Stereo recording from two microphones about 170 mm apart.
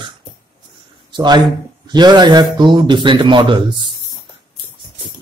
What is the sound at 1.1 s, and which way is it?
A man's voice, 25° right (ahead or behind).